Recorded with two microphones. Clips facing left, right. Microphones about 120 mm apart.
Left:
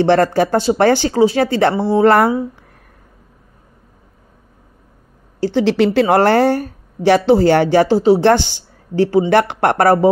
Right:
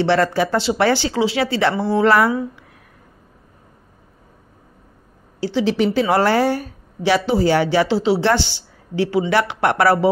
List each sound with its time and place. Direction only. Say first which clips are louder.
0.0 s speech: left 4 dB; 45° left (ahead or behind)
5.4 s a woman's voice: left 4 dB; 55° left (ahead or behind)